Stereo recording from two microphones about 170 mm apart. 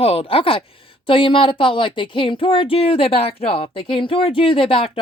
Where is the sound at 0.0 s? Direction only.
35° left (ahead or behind).